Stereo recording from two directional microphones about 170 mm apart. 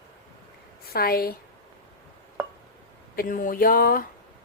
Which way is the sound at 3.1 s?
55° left (ahead or behind).